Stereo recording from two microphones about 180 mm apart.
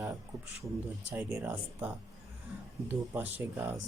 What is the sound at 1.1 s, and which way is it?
Speech, 10° right (ahead or behind).